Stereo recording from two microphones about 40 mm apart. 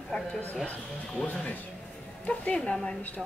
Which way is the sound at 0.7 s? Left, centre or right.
Left.